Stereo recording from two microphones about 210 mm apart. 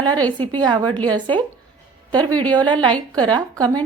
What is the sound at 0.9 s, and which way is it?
Speech, 5° left (ahead or behind).